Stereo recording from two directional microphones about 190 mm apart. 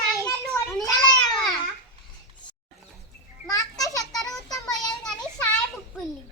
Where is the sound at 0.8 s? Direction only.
20° left (ahead or behind).